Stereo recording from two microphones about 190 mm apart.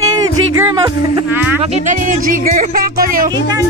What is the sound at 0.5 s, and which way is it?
Speech, 20° right (ahead or behind).